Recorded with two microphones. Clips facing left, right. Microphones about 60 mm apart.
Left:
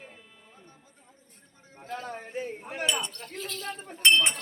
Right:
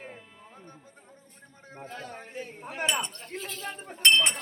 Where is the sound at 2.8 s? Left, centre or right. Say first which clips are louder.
Right 1 dB; right.